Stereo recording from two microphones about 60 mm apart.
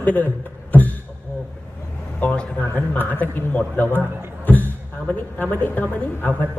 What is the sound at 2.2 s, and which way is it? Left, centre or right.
Speech, left.